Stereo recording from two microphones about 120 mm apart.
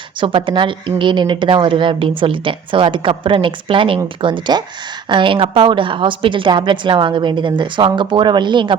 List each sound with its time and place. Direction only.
0.2 s a woman's voice: 45° right (ahead or behind)